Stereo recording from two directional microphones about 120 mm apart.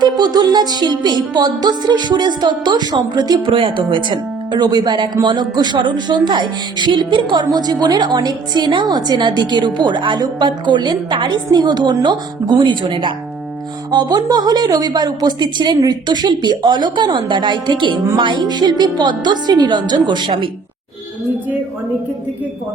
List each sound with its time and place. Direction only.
0.0 s music: 35° right (ahead or behind)